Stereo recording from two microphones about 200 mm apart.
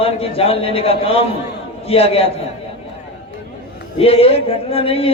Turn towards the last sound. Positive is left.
turn(degrees=30)  # may be behind; listen again after turning